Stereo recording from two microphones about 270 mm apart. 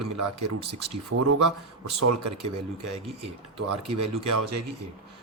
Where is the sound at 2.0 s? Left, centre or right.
Right.